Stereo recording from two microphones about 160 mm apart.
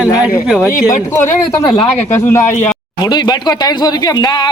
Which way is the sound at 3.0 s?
25° left (ahead or behind).